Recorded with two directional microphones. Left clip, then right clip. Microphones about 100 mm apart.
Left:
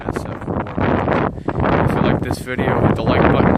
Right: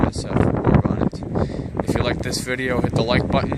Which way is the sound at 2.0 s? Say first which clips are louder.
Left 3 dB; 75° left (ahead or behind).